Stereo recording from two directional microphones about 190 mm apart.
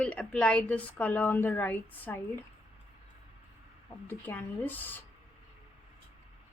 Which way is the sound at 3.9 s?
10° left (ahead or behind).